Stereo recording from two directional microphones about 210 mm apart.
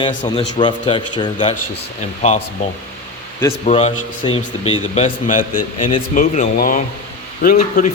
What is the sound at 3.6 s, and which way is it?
A man's voice, 30° left (ahead or behind).